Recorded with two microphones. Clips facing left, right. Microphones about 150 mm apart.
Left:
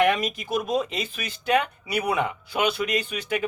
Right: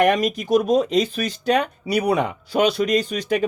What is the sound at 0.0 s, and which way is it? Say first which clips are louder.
A man's voice: right 4 dB; 45° right (ahead or behind).